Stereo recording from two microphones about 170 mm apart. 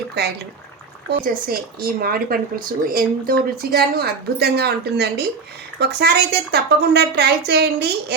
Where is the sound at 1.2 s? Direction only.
60° right (ahead or behind).